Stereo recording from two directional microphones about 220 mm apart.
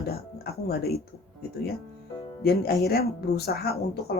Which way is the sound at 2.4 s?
45° left (ahead or behind).